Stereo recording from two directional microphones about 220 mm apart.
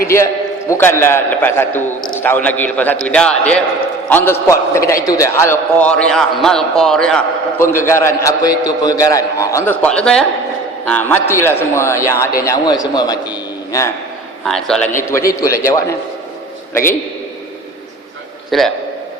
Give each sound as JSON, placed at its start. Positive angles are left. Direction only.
{"t": 0.7, "sound": "a man's voice", "side_deg": 10}
{"t": 14.4, "sound": "a man's voice", "side_deg": 5}
{"t": 18.5, "sound": "a man's voice", "side_deg": 0}